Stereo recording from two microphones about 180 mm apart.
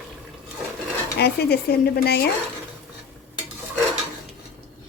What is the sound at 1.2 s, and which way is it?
A woman's voice, 60° left (ahead or behind).